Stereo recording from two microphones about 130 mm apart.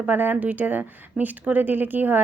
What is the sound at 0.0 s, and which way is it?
Speech, 15° right (ahead or behind).